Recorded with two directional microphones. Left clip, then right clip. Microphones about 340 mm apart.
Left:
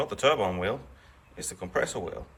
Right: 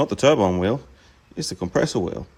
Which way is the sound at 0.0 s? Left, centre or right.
Centre.